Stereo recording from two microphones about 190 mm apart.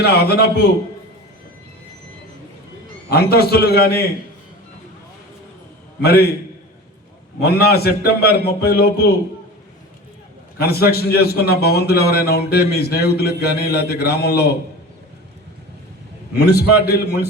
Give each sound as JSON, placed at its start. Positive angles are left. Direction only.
{"t": 0.0, "sound": "a man's voice", "side_deg": 55}
{"t": 3.1, "sound": "a man's voice", "side_deg": 55}
{"t": 6.0, "sound": "a man's voice", "side_deg": 55}
{"t": 7.3, "sound": "a man's voice", "side_deg": 55}
{"t": 10.6, "sound": "a man's voice", "side_deg": 55}
{"t": 16.4, "sound": "a man's voice", "side_deg": 55}